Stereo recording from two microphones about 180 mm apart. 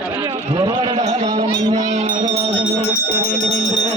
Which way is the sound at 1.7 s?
45° right (ahead or behind).